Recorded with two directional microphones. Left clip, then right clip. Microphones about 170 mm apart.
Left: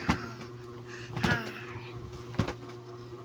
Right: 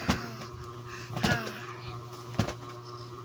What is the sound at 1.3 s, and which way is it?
Power windows, 35° right (ahead or behind).